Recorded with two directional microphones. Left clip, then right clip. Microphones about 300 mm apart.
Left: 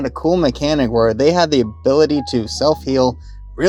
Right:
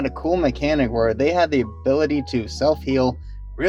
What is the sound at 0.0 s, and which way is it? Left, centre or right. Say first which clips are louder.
Speech: left 4 dB; left.